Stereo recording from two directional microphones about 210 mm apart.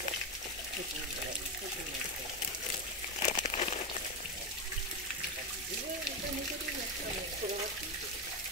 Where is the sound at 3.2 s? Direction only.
35° left (ahead or behind).